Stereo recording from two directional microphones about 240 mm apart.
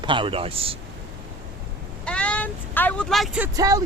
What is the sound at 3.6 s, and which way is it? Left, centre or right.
Speech, centre.